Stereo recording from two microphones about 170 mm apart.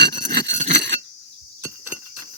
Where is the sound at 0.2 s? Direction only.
45° right (ahead or behind).